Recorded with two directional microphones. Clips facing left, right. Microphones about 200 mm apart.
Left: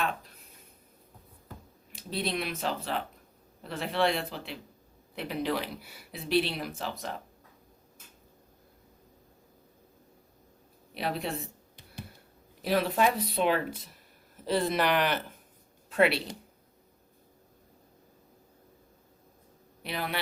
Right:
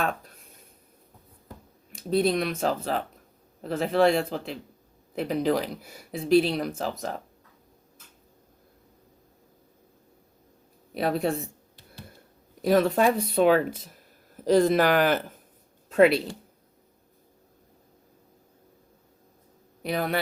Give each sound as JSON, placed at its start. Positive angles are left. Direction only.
{"t": 0.0, "sound": "a sound", "side_deg": -50}
{"t": 2.0, "sound": "speech", "side_deg": -50}
{"t": 10.9, "sound": "speech", "side_deg": -50}
{"t": 12.6, "sound": "speech", "side_deg": -45}
{"t": 19.8, "sound": "a man's voice", "side_deg": -45}